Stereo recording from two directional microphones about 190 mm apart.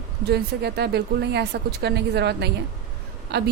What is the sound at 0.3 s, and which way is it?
A woman's voice, 60° right (ahead or behind).